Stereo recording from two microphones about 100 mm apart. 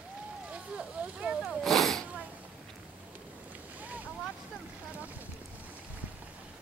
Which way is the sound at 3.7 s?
15° right (ahead or behind).